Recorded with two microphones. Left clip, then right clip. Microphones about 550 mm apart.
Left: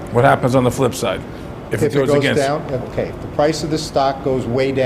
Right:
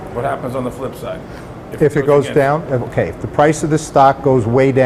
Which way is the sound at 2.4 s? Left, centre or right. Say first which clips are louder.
Right 4 dB; right.